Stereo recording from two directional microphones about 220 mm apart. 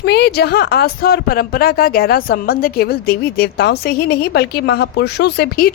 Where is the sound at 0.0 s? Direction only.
50° left (ahead or behind).